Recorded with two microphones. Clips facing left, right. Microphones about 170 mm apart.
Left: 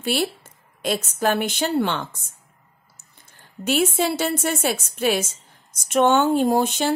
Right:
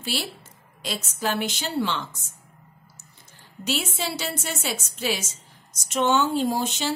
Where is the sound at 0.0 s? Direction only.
55° left (ahead or behind).